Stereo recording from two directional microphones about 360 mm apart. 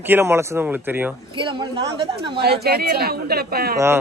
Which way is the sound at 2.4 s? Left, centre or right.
Right.